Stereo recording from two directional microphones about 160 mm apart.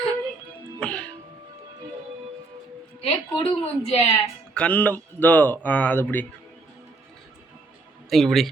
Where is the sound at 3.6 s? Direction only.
40° left (ahead or behind).